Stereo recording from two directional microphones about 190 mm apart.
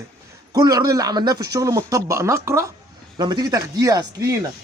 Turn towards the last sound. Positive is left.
turn(degrees=-20)  # may be behind; listen again after turning